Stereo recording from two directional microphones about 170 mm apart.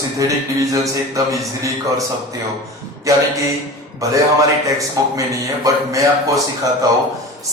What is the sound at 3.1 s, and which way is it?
Speech, 20° right (ahead or behind).